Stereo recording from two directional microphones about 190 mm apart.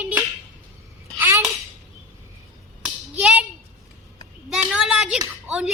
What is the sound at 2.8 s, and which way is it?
Clapping, 5° right (ahead or behind).